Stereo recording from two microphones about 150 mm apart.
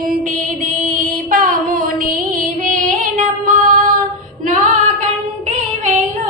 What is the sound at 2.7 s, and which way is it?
Female singing, 60° right (ahead or behind).